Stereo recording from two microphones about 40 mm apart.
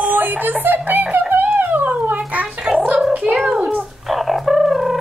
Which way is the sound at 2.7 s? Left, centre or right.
Centre.